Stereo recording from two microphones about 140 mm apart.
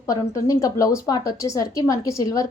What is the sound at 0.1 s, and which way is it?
A woman's voice, 25° left (ahead or behind).